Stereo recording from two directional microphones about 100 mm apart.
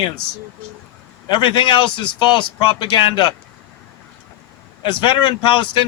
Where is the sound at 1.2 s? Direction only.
55° left (ahead or behind).